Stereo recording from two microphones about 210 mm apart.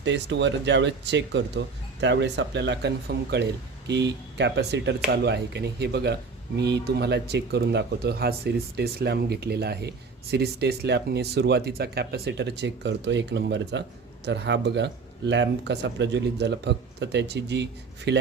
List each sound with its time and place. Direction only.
0.0 s speech: 60° right (ahead or behind)